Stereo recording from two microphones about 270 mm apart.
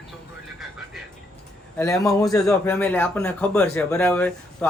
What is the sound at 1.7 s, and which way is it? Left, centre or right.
Speech, centre.